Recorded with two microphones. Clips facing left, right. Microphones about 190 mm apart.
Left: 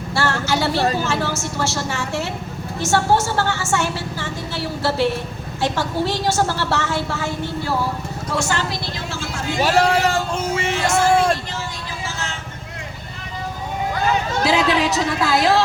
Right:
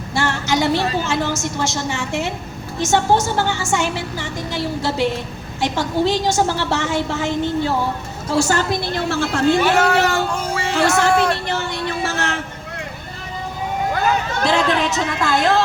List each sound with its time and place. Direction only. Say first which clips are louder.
0.1 s a sound: right 1 dB; 15° right (ahead or behind)
1.0 s a woman's voice: right 1 dB; 15° right (ahead or behind)
8.3 s a woman's voice: right 5 dB; 35° right (ahead or behind); by 9.6 s 65° right (ahead or behind)
9.6 s speech: right 1 dB; 35° left (ahead or behind)
10.2 s music: even; 25° left (ahead or behind)
10.8 s speech: right 3 dB; 65° right (ahead or behind)
11.2 s a sound: right 1 dB; 65° right (ahead or behind)
14.4 s a woman's voice: even; 5° left (ahead or behind)